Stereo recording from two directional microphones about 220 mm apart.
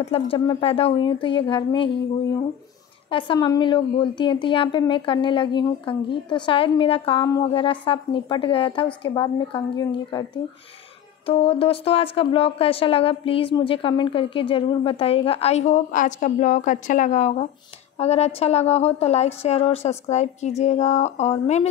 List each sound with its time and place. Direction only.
0.0 s a woman's voice: 25° left (ahead or behind)
3.1 s a woman's voice: 20° left (ahead or behind)
11.2 s a woman's voice: 25° left (ahead or behind)